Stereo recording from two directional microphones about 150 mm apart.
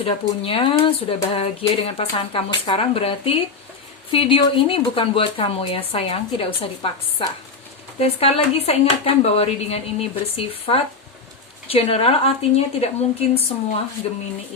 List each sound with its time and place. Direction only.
0.0 s speech: 35° left (ahead or behind)